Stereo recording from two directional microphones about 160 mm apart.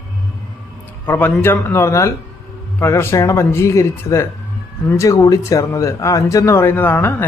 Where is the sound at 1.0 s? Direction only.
10° left (ahead or behind).